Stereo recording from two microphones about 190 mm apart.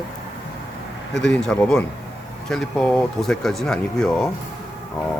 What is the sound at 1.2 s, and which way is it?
Speech, 5° left (ahead or behind).